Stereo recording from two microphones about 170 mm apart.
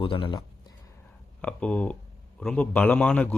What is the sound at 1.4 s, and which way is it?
A man's voice, 5° left (ahead or behind).